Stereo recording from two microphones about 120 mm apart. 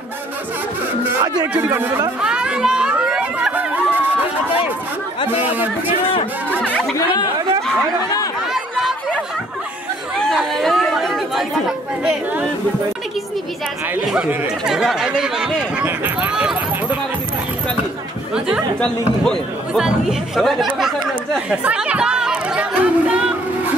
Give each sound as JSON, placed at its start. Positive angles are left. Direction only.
{"t": 1.5, "sound": "speech", "side_deg": -20}
{"t": 2.2, "sound": "crowd", "side_deg": -5}
{"t": 5.4, "sound": "speech", "side_deg": -15}
{"t": 6.6, "sound": "music", "side_deg": 10}
{"t": 8.5, "sound": "chatter", "side_deg": 0}
{"t": 10.3, "sound": "chatter", "side_deg": 0}
{"t": 12.0, "sound": "speech", "side_deg": -5}
{"t": 14.0, "sound": "speech", "side_deg": -5}
{"t": 18.8, "sound": "speech", "side_deg": 5}
{"t": 20.7, "sound": "chatter", "side_deg": 0}